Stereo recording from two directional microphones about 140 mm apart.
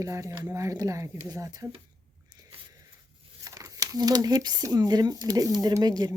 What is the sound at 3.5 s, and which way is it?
Speech, 25° right (ahead or behind).